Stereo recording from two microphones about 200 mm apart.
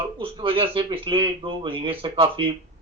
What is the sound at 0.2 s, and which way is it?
Speech, 25° right (ahead or behind).